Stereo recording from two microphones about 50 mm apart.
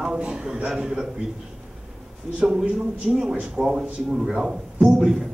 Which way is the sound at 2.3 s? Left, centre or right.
Centre.